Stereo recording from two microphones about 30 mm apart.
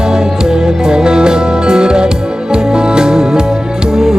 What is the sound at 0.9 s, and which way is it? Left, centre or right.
Music, right.